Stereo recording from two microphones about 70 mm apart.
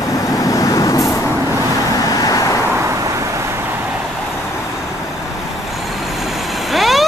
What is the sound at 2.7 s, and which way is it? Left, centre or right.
Vehicle, right.